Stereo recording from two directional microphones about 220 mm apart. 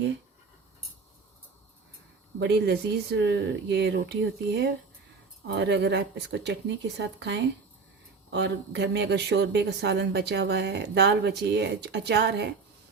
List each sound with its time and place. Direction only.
2.4 s speech: 50° right (ahead or behind)